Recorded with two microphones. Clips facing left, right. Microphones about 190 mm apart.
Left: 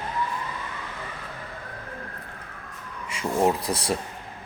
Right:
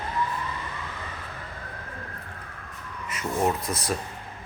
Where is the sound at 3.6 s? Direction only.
30° left (ahead or behind).